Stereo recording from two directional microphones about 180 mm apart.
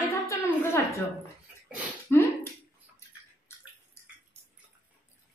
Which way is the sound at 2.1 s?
10° left (ahead or behind).